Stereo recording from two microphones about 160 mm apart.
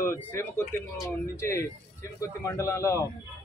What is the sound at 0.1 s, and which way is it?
A man's voice, 15° left (ahead or behind).